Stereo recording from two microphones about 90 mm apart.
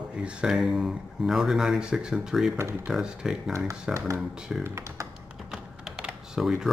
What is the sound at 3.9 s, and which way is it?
Speech, 35° right (ahead or behind).